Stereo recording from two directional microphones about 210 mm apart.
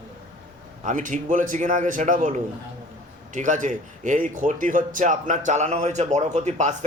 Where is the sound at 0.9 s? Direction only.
35° right (ahead or behind).